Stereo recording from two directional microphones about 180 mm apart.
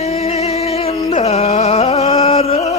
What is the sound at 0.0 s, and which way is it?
Music, 35° left (ahead or behind).